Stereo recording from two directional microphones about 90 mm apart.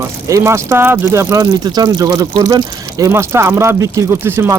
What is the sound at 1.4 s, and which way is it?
Speech, 45° right (ahead or behind).